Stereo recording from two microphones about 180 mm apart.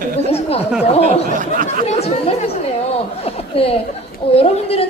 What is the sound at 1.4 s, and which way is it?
Speech, 50° right (ahead or behind).